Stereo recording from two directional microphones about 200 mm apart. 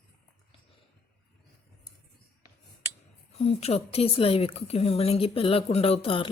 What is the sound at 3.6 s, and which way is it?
A woman's voice, 30° left (ahead or behind).